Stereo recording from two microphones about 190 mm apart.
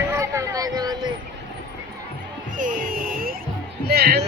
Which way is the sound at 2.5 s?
45° right (ahead or behind).